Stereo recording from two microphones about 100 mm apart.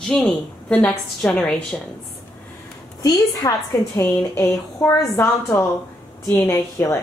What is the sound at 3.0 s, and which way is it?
A woman's voice, 40° left (ahead or behind).